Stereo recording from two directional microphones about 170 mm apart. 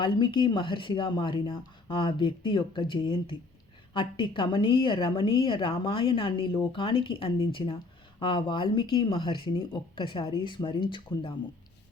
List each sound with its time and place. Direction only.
0.0 s a woman's voice: 30° left (ahead or behind)